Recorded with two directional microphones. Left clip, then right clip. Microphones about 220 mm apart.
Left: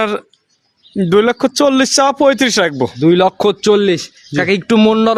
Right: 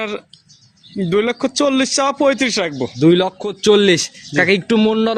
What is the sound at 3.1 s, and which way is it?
Speech, 10° left (ahead or behind).